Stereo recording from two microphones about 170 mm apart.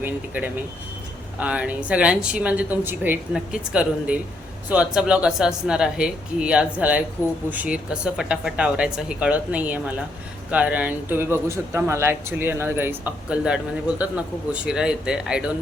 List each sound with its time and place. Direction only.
0.0 s speech: 10° right (ahead or behind)